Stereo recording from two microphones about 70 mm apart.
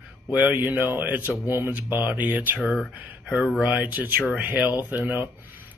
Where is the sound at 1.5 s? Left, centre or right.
Right.